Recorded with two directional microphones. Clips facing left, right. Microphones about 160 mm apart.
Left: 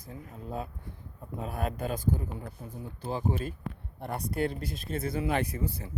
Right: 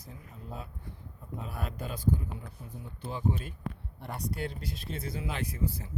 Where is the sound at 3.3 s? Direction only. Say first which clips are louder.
Left 4 dB; 40° left (ahead or behind).